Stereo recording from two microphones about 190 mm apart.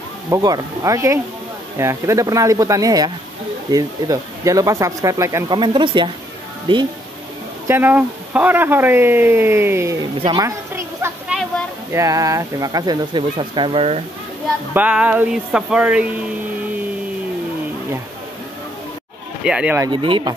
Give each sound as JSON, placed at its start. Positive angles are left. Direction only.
{"t": 0.3, "sound": "speech", "side_deg": -20}
{"t": 7.6, "sound": "speech", "side_deg": -10}
{"t": 10.2, "sound": "speech", "side_deg": -25}
{"t": 10.7, "sound": "a sound", "side_deg": -10}
{"t": 11.9, "sound": "speech", "side_deg": -15}
{"t": 14.7, "sound": "speech", "side_deg": -5}
{"t": 19.4, "sound": "speech", "side_deg": -5}
{"t": 19.9, "sound": "speech", "side_deg": -25}